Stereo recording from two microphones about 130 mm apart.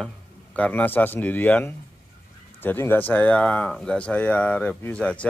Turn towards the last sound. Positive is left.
turn(degrees=10)  # may be behind; listen again after turning